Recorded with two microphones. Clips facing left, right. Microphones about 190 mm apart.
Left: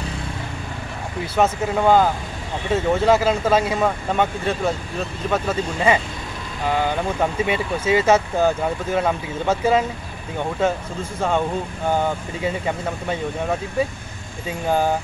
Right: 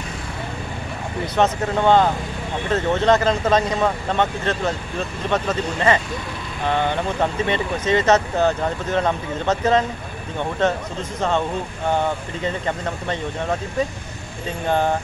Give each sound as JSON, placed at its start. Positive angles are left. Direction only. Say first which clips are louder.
{"t": 1.2, "sound": "speech", "louder": "even", "side_deg": 5}
{"t": 7.4, "sound": "speech", "louder": "even", "side_deg": 5}
{"t": 12.4, "sound": "speech", "louder": "left 1 dB", "side_deg": 10}
{"t": 14.7, "sound": "speech", "louder": "even", "side_deg": 5}